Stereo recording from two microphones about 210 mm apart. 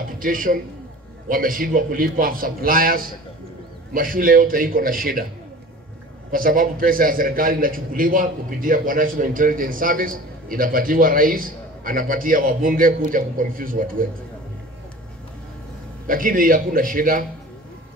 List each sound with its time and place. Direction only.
0.2 s a man's voice: 40° right (ahead or behind)
6.3 s a man's voice: 40° right (ahead or behind)
16.1 s a man's voice: 40° right (ahead or behind)